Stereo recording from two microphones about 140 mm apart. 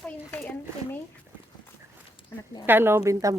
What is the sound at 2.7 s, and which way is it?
Speech, 15° right (ahead or behind).